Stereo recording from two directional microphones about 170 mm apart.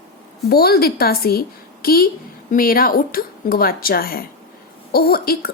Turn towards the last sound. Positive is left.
turn(degrees=65)  # may be behind; listen again after turning